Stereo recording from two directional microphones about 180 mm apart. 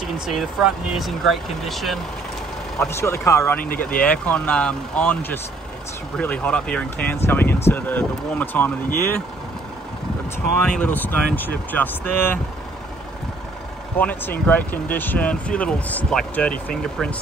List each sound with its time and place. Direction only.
0.3 s speech: centre (ahead or behind)
2.8 s speech: 15° left (ahead or behind)
3.6 s speech: 50° left (ahead or behind)
4.0 s speech: 5° left (ahead or behind)
10.6 s speech: 10° left (ahead or behind)
13.9 s speech: 10° left (ahead or behind)